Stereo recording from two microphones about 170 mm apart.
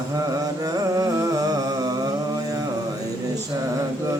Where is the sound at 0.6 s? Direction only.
20° right (ahead or behind).